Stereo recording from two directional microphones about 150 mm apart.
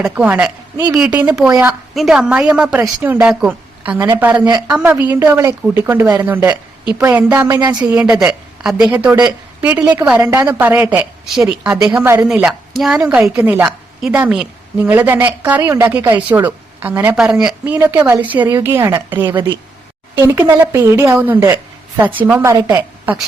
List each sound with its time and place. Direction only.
0.0 s a woman's voice: 10° right (ahead or behind)
2.0 s a woman's voice: 5° right (ahead or behind); by 7.9 s 25° right (ahead or behind)
8.1 s a woman's voice: 5° right (ahead or behind)